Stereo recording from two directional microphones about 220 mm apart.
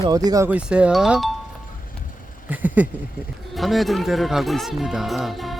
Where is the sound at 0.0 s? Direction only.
15° right (ahead or behind); by 1.3 s centre (ahead or behind).